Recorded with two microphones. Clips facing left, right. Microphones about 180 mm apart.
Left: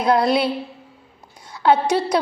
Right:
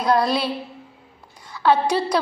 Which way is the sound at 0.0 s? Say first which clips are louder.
Left 2 dB; 25° left (ahead or behind).